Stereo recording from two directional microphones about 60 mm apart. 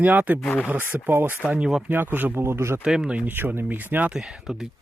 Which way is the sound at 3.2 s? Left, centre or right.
Right.